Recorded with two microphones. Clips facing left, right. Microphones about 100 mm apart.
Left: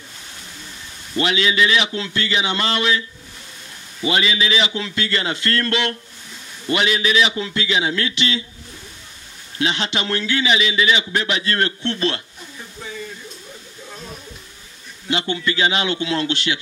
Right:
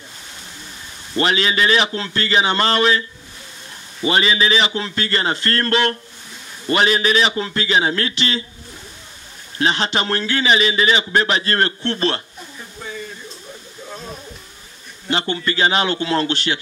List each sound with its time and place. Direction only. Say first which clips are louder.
1.1 s a man's voice: right 1 dB; 40° right (ahead or behind)
9.6 s a man's voice: right 3 dB; 40° right (ahead or behind)
15.0 s a man's voice: right 1 dB; 40° right (ahead or behind)